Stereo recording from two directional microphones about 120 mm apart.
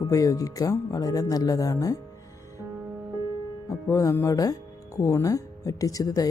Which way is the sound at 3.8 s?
25° left (ahead or behind).